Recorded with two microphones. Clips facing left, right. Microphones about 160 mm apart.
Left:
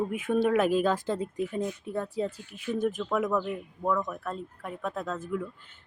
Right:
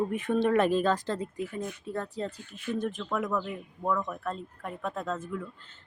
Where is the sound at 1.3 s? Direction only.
20° left (ahead or behind); by 5.4 s centre (ahead or behind).